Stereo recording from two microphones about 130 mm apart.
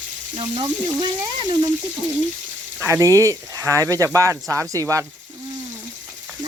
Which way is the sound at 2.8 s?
20° right (ahead or behind).